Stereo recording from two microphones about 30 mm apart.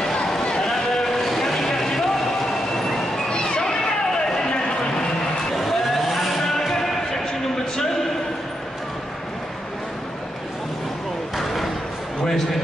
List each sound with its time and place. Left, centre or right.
0.0 s run: left
0.6 s sheep: centre
3.3 s a sound: left
5.5 s vehicle: centre
11.3 s slam: centre